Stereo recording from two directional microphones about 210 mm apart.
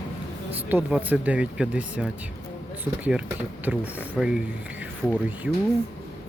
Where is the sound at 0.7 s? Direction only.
10° right (ahead or behind).